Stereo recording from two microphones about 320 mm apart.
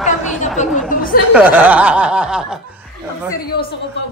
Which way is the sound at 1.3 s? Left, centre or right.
Centre.